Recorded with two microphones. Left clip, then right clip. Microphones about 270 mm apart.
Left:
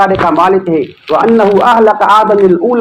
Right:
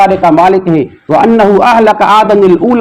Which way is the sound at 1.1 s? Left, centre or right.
Right.